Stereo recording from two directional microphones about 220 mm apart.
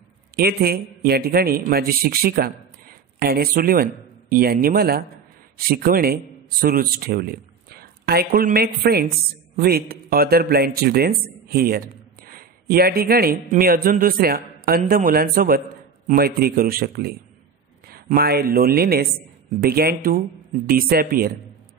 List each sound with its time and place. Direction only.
0.4 s a man's voice: 45° right (ahead or behind)